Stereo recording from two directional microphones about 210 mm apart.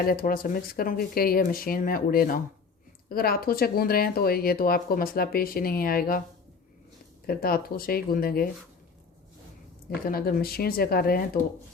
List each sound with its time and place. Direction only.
0.0 s speech: 45° left (ahead or behind)
7.3 s speech: 45° left (ahead or behind)
10.1 s speech: 45° left (ahead or behind)